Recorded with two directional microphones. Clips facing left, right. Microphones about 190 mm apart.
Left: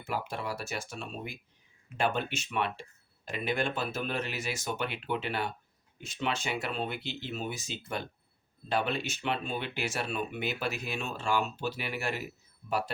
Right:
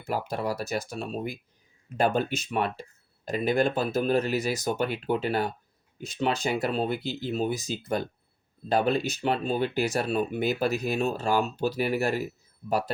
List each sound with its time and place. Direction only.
0.0 s speech: 40° right (ahead or behind)